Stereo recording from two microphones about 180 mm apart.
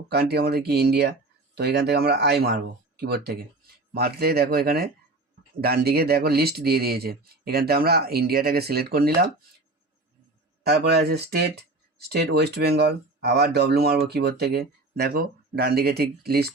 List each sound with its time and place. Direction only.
0.1 s speech: 60° right (ahead or behind)
10.6 s speech: 65° right (ahead or behind)